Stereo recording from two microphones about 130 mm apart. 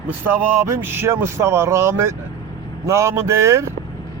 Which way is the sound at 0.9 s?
20° right (ahead or behind).